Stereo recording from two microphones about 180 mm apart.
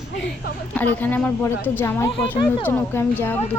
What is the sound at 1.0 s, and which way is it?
Speech, 10° left (ahead or behind).